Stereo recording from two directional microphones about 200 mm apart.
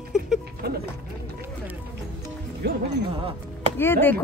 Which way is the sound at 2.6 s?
55° right (ahead or behind).